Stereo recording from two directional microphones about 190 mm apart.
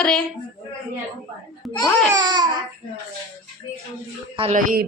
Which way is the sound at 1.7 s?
20° left (ahead or behind).